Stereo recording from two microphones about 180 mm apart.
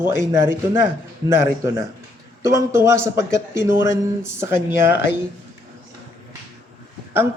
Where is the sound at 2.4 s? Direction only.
15° right (ahead or behind).